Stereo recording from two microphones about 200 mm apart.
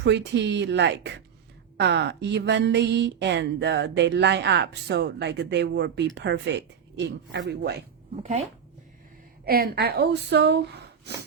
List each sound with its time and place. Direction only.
0.0 s speech: 60° right (ahead or behind)
8.2 s speech: 35° right (ahead or behind)
9.5 s speech: 50° right (ahead or behind)